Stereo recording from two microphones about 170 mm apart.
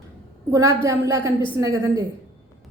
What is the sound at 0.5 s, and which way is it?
A woman's voice, 15° right (ahead or behind).